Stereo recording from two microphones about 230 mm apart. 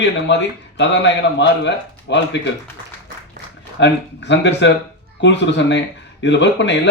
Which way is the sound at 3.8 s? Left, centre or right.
Left.